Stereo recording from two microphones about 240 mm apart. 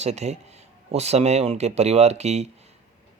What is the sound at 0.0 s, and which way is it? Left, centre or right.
Speech, right.